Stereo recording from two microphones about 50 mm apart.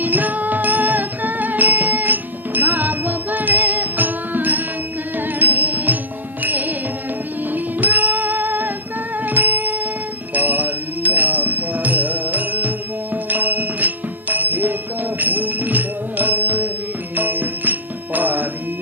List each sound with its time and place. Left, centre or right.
0.0 s music: right
10.3 s bell: right
13.2 s music: right